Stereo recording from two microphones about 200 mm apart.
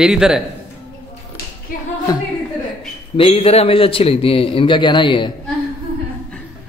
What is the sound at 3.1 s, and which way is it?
A man's voice, 30° left (ahead or behind).